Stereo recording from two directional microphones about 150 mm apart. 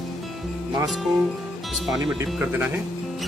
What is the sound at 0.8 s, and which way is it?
Speech, centre (ahead or behind).